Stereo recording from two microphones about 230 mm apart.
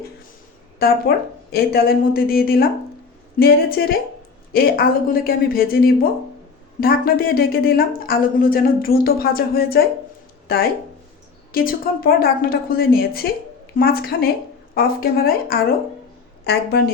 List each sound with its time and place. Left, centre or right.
0.8 s speech: left
11.5 s a woman's voice: left